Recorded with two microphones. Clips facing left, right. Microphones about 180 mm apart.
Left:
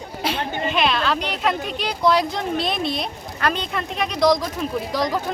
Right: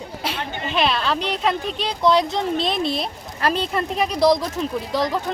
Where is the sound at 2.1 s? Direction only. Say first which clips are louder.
Right 1 dB; 20° right (ahead or behind).